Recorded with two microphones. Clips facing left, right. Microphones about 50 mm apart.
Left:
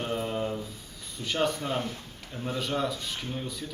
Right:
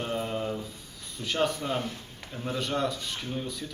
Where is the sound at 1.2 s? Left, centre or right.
Centre.